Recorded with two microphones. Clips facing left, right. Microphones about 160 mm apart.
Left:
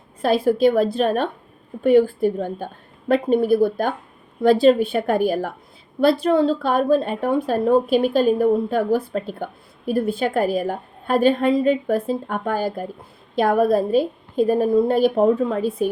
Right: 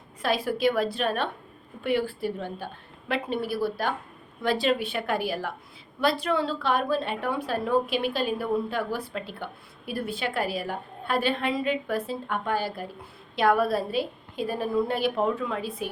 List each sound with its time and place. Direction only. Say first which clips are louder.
0.2 s a woman's voice: left 9 dB; 45° left (ahead or behind)